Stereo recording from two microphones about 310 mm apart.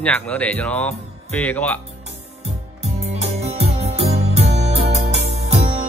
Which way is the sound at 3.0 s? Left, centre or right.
Right.